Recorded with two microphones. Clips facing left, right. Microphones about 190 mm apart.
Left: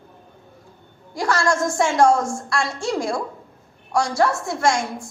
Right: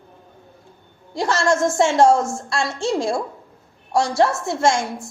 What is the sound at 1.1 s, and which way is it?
A woman's voice, 25° right (ahead or behind).